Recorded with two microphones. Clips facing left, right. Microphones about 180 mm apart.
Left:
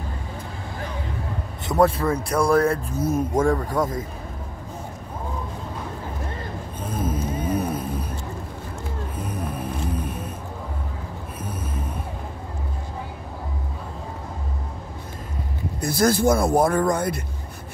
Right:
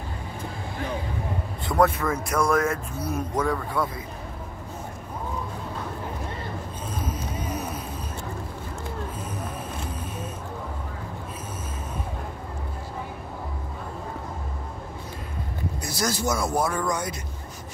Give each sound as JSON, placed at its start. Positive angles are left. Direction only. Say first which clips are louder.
{"t": 1.7, "sound": "speech", "louder": "left 3 dB", "side_deg": 30}
{"t": 3.3, "sound": "speech", "louder": "left 3 dB", "side_deg": 45}
{"t": 6.9, "sound": "vehicle", "louder": "left 7 dB", "side_deg": 55}
{"t": 15.8, "sound": "speech", "louder": "left 9 dB", "side_deg": 55}